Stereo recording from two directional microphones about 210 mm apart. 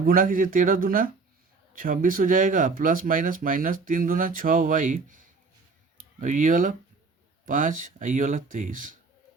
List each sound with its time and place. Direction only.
0.0 s speech: 40° right (ahead or behind)